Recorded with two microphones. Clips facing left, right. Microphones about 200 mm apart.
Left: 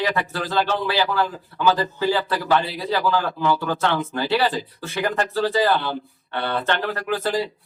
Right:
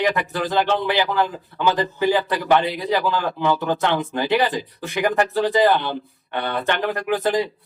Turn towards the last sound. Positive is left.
turn(degrees=-20)  # may be behind; listen again after turning